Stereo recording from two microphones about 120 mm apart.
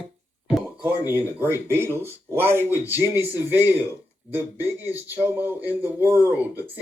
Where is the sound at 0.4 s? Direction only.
10° right (ahead or behind).